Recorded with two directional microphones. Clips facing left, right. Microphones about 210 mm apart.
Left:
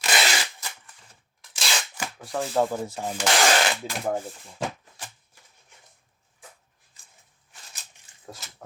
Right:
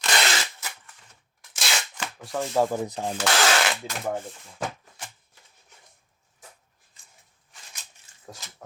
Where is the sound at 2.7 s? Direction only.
15° right (ahead or behind).